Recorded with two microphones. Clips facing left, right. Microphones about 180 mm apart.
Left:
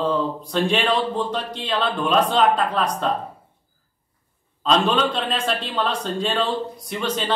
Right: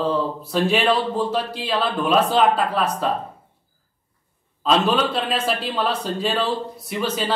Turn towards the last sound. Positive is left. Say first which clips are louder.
# right 1 dB
turn(degrees=-5)  # may be behind; listen again after turning